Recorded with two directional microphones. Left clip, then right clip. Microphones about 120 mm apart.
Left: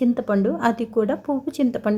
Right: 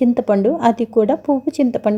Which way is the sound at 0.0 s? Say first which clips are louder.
Right 6 dB; 30° right (ahead or behind).